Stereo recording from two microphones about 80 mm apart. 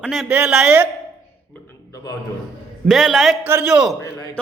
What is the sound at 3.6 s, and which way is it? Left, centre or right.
Speech, centre.